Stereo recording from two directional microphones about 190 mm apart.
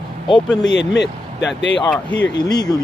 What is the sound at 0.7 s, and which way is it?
Speech, 65° left (ahead or behind).